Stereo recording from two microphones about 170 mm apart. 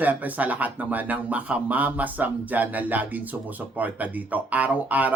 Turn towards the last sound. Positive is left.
turn(degrees=-10)  # may be behind; listen again after turning